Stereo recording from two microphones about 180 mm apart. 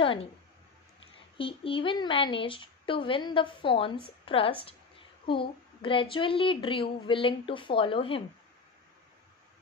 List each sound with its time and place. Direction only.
0.0 s speech: 30° left (ahead or behind)
1.4 s a woman's voice: 30° left (ahead or behind)